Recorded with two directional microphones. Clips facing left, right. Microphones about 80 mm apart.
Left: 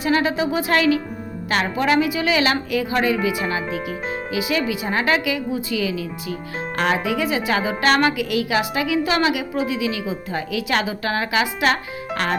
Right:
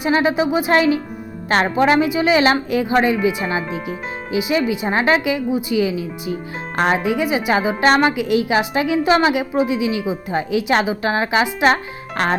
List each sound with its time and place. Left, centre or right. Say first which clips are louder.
0.0 s a woman's voice: right 3 dB; right